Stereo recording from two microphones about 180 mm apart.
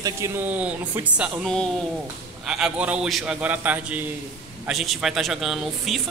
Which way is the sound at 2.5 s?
5° right (ahead or behind).